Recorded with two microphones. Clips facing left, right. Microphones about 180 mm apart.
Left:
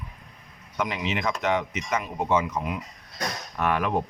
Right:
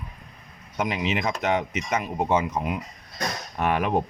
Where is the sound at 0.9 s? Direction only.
15° right (ahead or behind).